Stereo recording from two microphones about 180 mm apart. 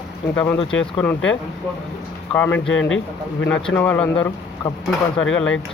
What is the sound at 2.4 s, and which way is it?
Speech, 10° left (ahead or behind).